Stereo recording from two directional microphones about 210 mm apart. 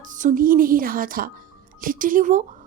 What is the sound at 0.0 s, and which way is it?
A woman's voice, 35° right (ahead or behind).